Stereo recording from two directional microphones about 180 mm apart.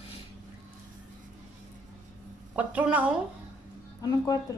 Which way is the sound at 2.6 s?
10° right (ahead or behind).